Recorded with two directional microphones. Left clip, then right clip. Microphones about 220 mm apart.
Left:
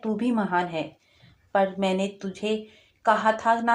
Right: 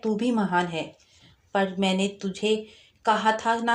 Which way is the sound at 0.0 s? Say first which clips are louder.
Right 1 dB; 35° right (ahead or behind).